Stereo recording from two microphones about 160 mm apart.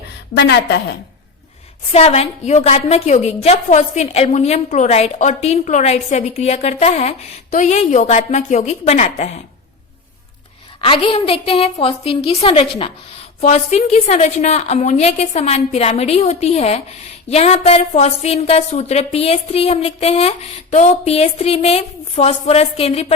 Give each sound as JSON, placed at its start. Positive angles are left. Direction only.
{"t": 0.3, "sound": "a woman's voice", "side_deg": 90}
{"t": 1.9, "sound": "a woman's voice", "side_deg": 40}
{"t": 10.8, "sound": "a woman's voice", "side_deg": 35}